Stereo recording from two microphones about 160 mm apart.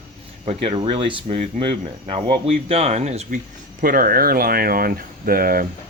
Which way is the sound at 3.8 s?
65° right (ahead or behind).